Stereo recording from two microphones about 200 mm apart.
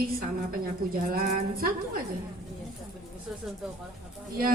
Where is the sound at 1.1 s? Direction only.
45° right (ahead or behind).